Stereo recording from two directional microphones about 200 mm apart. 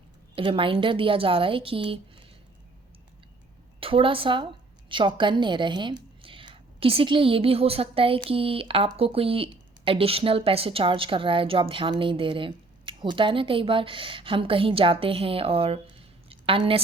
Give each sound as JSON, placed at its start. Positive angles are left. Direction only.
{"t": 0.3, "sound": "speech", "side_deg": -25}
{"t": 3.8, "sound": "a woman's voice", "side_deg": -25}